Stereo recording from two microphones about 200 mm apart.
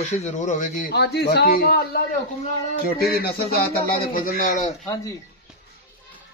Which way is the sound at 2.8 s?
50° left (ahead or behind).